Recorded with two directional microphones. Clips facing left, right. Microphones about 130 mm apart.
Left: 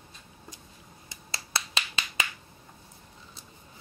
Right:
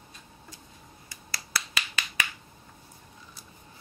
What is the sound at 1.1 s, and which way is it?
Finger snapping, 25° left (ahead or behind).